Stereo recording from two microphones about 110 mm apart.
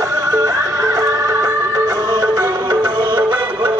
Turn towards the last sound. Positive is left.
turn(degrees=-45)  # may be behind; listen again after turning